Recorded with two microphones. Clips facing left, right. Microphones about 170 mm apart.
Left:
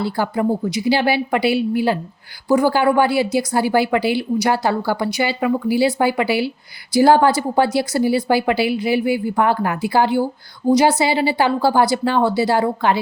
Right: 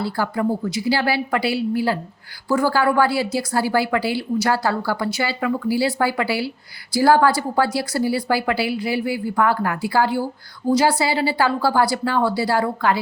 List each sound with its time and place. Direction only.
0.0 s a woman's voice: 20° left (ahead or behind)